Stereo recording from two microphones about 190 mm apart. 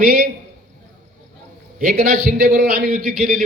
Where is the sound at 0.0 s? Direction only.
50° right (ahead or behind).